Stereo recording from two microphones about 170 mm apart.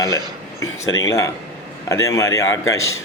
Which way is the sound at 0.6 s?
20° left (ahead or behind).